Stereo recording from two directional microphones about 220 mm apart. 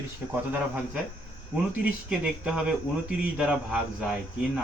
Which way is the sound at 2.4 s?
5° right (ahead or behind).